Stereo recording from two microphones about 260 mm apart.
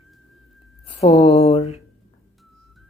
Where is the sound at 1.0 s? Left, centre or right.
Left.